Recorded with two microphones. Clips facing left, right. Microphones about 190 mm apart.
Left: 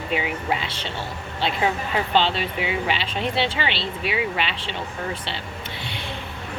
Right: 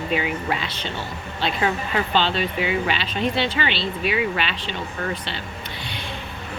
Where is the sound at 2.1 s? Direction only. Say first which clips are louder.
Left 1 dB; 25° left (ahead or behind).